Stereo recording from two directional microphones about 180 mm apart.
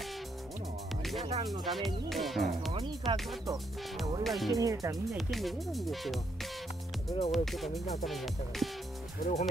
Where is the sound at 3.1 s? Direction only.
Centre (ahead or behind).